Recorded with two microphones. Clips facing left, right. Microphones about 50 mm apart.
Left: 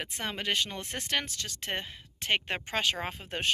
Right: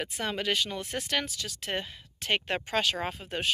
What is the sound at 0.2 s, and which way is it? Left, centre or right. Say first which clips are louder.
Speech: right 2 dB; left.